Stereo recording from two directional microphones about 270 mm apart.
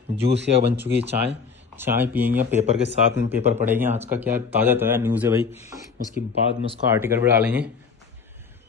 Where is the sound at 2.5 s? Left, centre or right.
Right.